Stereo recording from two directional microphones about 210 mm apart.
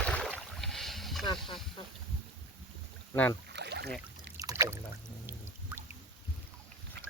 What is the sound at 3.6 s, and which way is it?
Boat, 50° right (ahead or behind).